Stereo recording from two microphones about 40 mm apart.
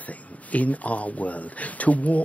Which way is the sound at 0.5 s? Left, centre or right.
Left.